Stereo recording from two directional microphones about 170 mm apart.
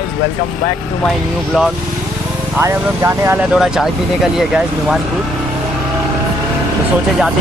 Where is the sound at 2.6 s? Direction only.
15° right (ahead or behind).